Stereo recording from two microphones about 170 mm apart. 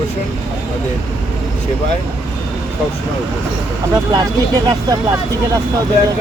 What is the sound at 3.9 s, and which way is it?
Speech, 25° right (ahead or behind).